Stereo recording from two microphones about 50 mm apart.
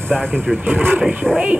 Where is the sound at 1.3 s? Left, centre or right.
Centre.